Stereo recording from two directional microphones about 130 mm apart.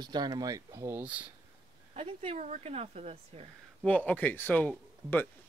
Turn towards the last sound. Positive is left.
turn(degrees=15)  # may be behind; listen again after turning